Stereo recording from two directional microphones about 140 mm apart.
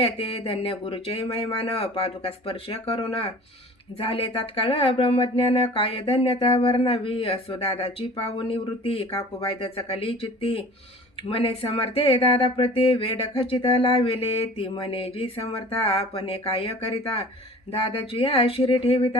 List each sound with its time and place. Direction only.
0.0 s speech: 40° left (ahead or behind)